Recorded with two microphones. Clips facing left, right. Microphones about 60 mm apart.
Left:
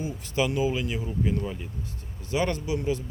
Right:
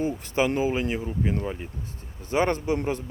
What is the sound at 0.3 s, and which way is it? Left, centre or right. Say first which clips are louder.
Speech: right 1 dB; right.